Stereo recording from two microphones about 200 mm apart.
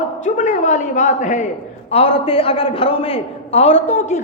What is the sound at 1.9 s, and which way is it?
A man's voice, 25° left (ahead or behind).